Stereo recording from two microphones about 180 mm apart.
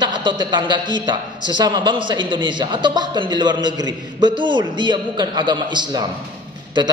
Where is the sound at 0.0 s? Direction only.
25° right (ahead or behind).